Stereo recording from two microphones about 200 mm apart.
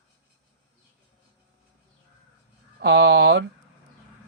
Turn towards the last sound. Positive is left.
turn(degrees=-55)  # may be behind; listen again after turning